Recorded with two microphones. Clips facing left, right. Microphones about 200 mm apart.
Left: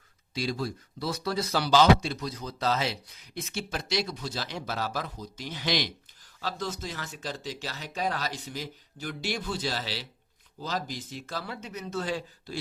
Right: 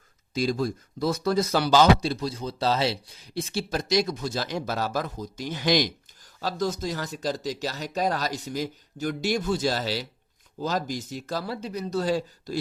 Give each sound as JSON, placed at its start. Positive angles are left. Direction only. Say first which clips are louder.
{"t": 0.3, "sound": "speech", "louder": "right 6 dB", "side_deg": -45}